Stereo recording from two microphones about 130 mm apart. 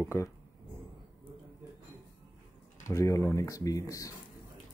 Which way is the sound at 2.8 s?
25° left (ahead or behind).